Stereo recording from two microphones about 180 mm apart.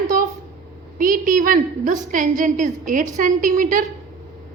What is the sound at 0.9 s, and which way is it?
A woman's voice, 50° right (ahead or behind).